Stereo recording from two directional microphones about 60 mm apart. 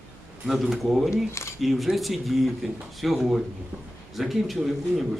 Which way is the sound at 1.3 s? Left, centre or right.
Left.